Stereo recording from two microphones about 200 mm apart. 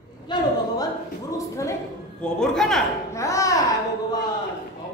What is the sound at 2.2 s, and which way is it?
Speech, 5° left (ahead or behind).